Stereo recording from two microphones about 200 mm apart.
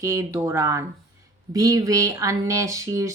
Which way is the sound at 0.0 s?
15° right (ahead or behind).